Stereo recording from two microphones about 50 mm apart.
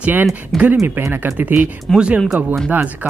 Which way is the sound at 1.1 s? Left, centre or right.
Right.